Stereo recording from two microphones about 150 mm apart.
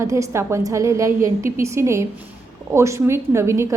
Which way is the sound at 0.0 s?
20° right (ahead or behind).